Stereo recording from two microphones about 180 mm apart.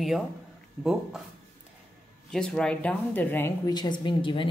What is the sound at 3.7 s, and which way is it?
Speech, 25° left (ahead or behind).